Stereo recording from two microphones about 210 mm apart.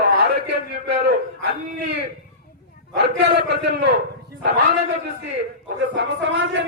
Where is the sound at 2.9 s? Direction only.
55° right (ahead or behind).